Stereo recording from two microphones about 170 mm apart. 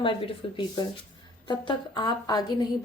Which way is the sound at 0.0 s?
30° left (ahead or behind).